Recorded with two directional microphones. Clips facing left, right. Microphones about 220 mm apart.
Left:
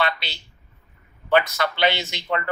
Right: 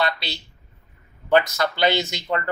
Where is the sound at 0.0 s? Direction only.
40° right (ahead or behind).